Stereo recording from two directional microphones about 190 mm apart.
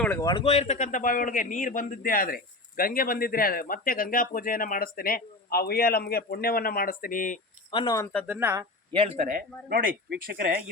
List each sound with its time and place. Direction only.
0.0 s speech: 15° left (ahead or behind); by 7.3 s 45° left (ahead or behind)
7.7 s speech: 20° left (ahead or behind)
8.3 s speech: 10° right (ahead or behind)
8.9 s speech: 30° right (ahead or behind); by 10.5 s 50° right (ahead or behind)